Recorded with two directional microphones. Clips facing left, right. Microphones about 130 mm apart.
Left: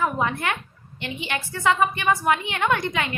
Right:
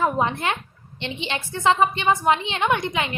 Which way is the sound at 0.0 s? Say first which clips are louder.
Right 2 dB; 25° right (ahead or behind).